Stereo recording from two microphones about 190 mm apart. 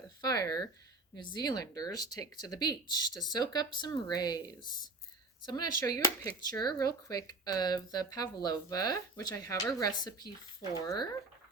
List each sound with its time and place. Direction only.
0.2 s speech: 20° left (ahead or behind)